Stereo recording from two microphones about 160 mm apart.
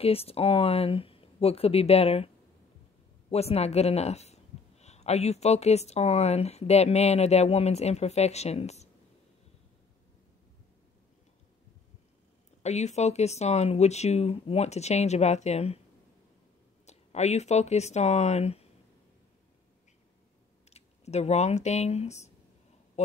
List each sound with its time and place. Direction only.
0.0 s a man's voice: 40° left (ahead or behind)
12.6 s a man's voice: 45° left (ahead or behind)
16.8 s speech: 45° left (ahead or behind)
20.7 s a man's voice: 45° left (ahead or behind)